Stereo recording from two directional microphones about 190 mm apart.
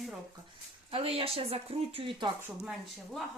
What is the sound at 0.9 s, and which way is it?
A woman's voice, 30° right (ahead or behind).